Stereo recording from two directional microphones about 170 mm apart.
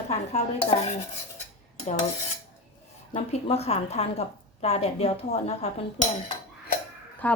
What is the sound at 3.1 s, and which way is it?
A woman's voice, 40° left (ahead or behind).